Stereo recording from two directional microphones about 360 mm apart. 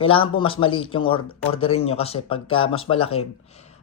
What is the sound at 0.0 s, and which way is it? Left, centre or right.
Speech, centre.